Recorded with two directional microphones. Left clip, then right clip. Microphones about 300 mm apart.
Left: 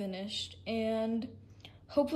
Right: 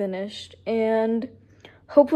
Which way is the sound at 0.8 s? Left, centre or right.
Centre.